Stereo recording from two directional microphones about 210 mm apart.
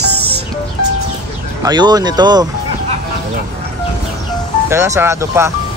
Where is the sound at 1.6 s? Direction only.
20° right (ahead or behind).